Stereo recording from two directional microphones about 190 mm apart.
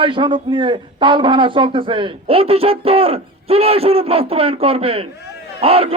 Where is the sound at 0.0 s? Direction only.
25° right (ahead or behind).